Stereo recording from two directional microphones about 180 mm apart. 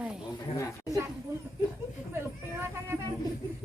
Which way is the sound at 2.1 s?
15° right (ahead or behind).